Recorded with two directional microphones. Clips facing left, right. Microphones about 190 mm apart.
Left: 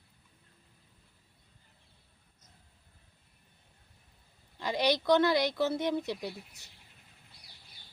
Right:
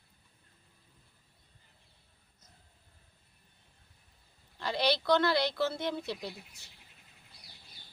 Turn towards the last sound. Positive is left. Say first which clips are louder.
# left 3 dB
turn(degrees=15)  # may be behind; listen again after turning